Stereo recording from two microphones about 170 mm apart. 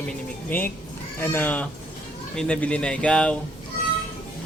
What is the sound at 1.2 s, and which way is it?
Speech, 10° left (ahead or behind).